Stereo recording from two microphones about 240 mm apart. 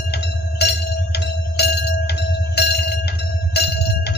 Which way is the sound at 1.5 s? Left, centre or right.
Left.